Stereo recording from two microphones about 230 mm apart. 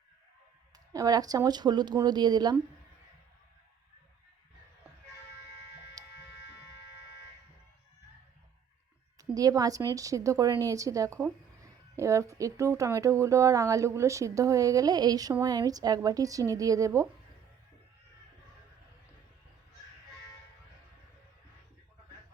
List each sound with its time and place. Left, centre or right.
0.9 s a woman's voice: centre
9.3 s a woman's voice: centre